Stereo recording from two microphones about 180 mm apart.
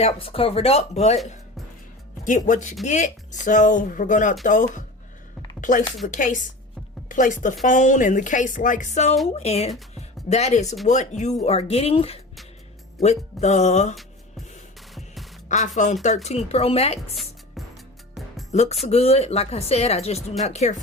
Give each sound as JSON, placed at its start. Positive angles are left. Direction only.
{"t": 0.0, "sound": "speech", "side_deg": 30}
{"t": 2.2, "sound": "a woman's voice", "side_deg": 45}
{"t": 14.9, "sound": "music", "side_deg": 0}
{"t": 15.4, "sound": "speech", "side_deg": 40}
{"t": 18.5, "sound": "speech", "side_deg": 35}